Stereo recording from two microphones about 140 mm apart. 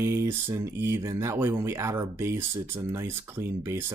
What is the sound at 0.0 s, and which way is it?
Speech, 20° right (ahead or behind).